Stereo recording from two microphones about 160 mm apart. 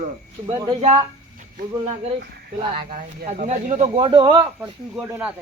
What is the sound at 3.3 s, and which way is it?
Speech, 50° right (ahead or behind).